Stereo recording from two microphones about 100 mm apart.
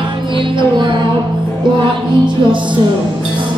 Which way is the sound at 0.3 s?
55° right (ahead or behind).